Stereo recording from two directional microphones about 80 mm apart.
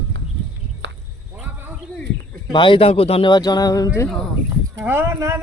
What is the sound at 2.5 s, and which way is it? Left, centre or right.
Speech, left.